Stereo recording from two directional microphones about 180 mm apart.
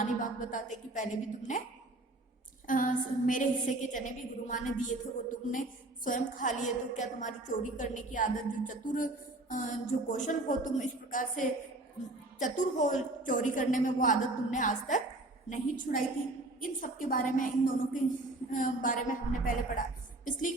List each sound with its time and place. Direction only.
0.0 s a woman's voice: 45° left (ahead or behind)
2.6 s a woman's voice: 45° left (ahead or behind)
10.1 s a woman's voice: 45° left (ahead or behind)